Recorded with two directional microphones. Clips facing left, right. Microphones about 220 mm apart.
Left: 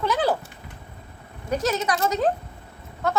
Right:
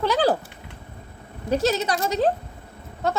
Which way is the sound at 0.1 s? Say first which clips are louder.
Right 2 dB; 35° right (ahead or behind).